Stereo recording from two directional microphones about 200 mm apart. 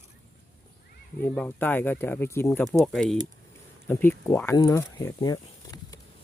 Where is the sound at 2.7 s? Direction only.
Centre (ahead or behind); by 6.0 s 20° left (ahead or behind).